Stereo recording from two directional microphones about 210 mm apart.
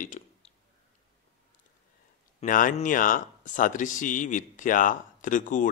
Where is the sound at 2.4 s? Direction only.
40° left (ahead or behind).